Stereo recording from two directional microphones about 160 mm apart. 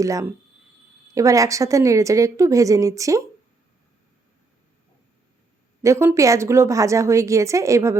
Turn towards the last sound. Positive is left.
turn(degrees=-20)  # may be behind; listen again after turning